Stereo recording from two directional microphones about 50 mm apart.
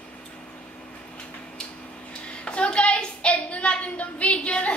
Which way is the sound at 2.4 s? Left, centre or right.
Left.